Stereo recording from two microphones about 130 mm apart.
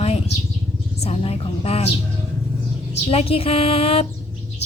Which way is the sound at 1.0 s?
50° left (ahead or behind).